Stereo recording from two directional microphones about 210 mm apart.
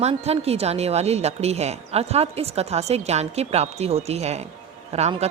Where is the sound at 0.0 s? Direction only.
30° right (ahead or behind).